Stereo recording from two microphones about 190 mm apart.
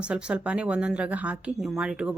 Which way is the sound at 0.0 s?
5° right (ahead or behind).